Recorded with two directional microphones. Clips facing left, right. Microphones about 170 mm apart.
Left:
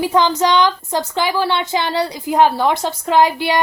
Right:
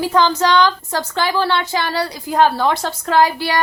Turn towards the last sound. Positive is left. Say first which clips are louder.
# left 1 dB
turn(degrees=20)  # may be behind; listen again after turning